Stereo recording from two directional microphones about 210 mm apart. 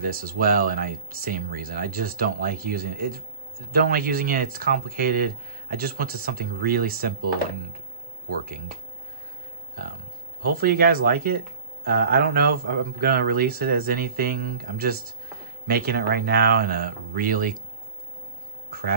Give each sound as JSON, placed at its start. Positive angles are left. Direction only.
{"t": 0.0, "sound": "speech", "side_deg": -45}
{"t": 10.4, "sound": "speech", "side_deg": -45}
{"t": 18.7, "sound": "speech", "side_deg": -45}